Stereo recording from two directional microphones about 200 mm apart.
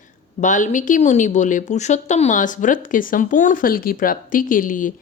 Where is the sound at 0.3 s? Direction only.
40° left (ahead or behind).